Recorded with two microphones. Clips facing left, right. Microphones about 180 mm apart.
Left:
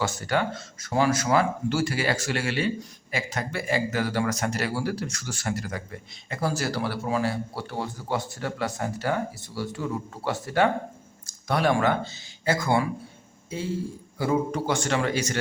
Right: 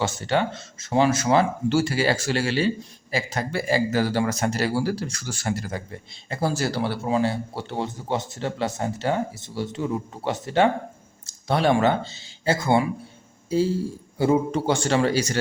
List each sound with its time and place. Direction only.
0.0 s speech: 25° right (ahead or behind)
13.5 s a man's voice: 35° right (ahead or behind)